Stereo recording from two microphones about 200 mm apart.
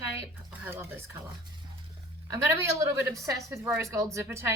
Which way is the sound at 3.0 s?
15° right (ahead or behind).